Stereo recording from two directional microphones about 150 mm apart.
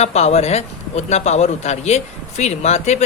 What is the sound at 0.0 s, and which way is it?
A man's voice, 45° left (ahead or behind).